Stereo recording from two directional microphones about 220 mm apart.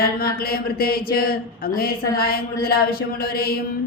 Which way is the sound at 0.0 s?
45° left (ahead or behind).